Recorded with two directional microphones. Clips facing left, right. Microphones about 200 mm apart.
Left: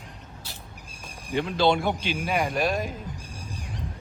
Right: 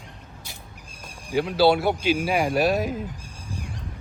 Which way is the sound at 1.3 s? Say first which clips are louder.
Right 3 dB; 5° right (ahead or behind).